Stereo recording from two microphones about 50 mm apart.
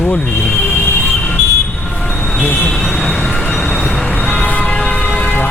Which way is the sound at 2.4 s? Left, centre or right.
Left.